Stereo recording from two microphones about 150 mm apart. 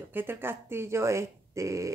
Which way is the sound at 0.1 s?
15° right (ahead or behind).